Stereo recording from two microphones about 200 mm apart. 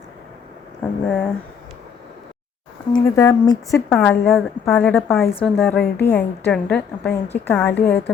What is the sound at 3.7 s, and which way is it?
A woman's voice, centre (ahead or behind).